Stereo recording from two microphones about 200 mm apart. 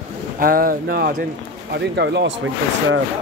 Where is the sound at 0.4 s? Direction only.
45° right (ahead or behind).